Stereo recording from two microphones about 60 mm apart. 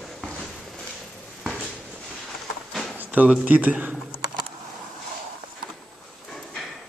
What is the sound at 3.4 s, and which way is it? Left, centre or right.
Speech, right.